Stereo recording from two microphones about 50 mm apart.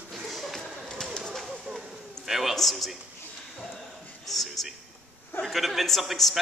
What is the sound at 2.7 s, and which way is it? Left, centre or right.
Speech, centre.